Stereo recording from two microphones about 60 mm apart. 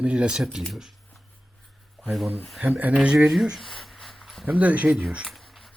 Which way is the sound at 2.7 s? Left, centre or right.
Right.